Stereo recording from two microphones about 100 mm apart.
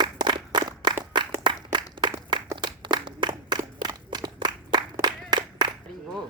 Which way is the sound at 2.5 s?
50° right (ahead or behind).